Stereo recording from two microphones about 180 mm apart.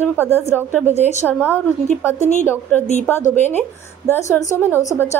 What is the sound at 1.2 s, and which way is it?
Speech, 10° left (ahead or behind).